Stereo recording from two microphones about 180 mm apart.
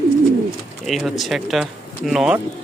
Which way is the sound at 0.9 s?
Centre (ahead or behind).